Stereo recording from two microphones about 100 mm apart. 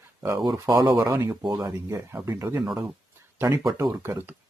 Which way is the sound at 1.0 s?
30° right (ahead or behind).